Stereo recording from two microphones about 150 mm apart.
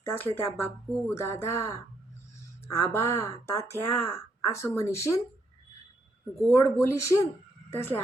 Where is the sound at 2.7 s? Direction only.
15° left (ahead or behind).